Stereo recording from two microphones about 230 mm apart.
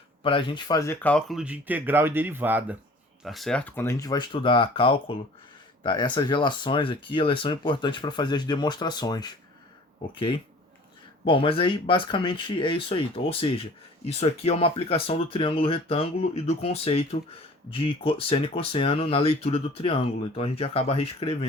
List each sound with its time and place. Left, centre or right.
0.2 s speech: left
11.3 s speech: left